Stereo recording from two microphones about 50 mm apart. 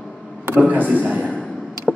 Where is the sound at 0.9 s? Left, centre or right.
Right.